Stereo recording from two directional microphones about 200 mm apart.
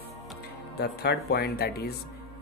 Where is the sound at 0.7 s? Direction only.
55° left (ahead or behind).